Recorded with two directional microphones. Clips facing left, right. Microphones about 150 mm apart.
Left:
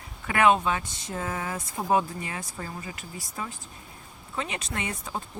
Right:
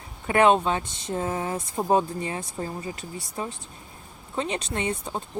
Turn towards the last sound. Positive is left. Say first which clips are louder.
# right 5 dB
turn(degrees=-30)  # may be behind; listen again after turning